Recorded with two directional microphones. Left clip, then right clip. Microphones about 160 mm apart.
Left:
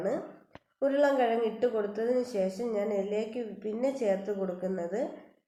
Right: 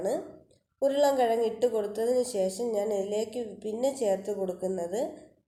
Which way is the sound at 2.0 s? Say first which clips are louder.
Right 3 dB; 50° right (ahead or behind).